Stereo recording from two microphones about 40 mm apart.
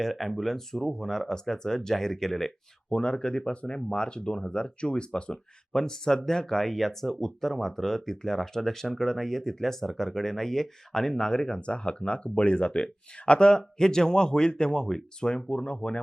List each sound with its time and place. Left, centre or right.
0.0 s speech: centre
2.9 s speech: left
15.4 s speech: left